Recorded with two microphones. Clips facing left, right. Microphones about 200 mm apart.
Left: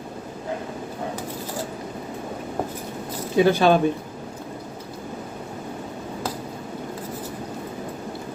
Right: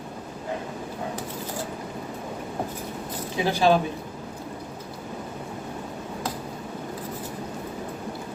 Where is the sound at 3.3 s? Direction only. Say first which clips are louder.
Left 4 dB; 55° left (ahead or behind).